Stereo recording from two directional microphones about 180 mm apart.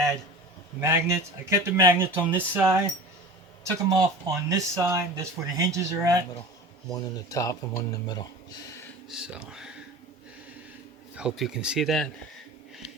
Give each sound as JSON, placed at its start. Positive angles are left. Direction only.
{"t": 0.8, "sound": "speech", "side_deg": -15}
{"t": 3.8, "sound": "speech", "side_deg": -20}
{"t": 6.9, "sound": "speech", "side_deg": 20}
{"t": 9.0, "sound": "speech", "side_deg": -5}
{"t": 11.1, "sound": "speech", "side_deg": -5}